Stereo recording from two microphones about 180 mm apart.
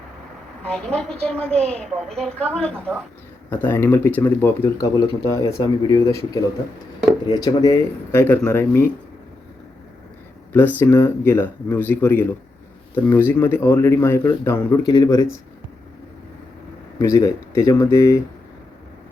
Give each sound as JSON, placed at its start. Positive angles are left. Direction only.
{"t": 0.6, "sound": "a woman's voice", "side_deg": 5}
{"t": 10.8, "sound": "speech", "side_deg": 15}
{"t": 17.0, "sound": "speech", "side_deg": 15}